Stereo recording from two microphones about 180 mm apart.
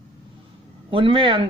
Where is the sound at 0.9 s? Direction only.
30° right (ahead or behind).